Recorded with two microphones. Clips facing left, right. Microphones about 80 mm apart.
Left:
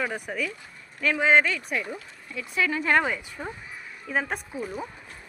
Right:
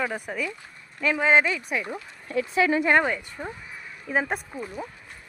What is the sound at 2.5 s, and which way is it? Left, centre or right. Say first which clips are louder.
Speech: right 4 dB; right.